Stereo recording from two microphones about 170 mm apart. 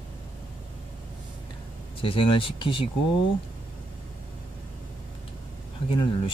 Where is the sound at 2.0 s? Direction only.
30° left (ahead or behind).